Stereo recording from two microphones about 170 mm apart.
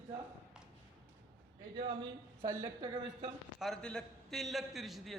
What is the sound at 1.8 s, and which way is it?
Speech, 25° right (ahead or behind).